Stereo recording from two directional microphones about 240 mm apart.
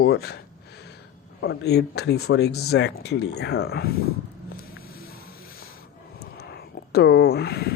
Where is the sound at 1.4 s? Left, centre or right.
Left.